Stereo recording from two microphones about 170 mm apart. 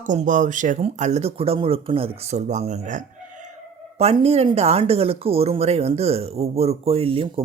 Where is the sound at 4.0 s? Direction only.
35° right (ahead or behind).